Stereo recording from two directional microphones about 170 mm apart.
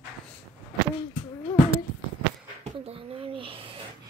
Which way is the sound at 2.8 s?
35° right (ahead or behind).